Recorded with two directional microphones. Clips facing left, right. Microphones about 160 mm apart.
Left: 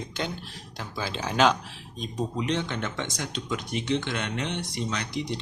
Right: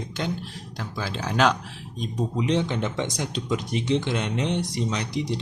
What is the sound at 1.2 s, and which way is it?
Speech, centre (ahead or behind).